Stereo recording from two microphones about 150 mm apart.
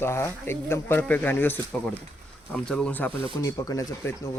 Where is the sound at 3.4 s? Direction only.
20° left (ahead or behind).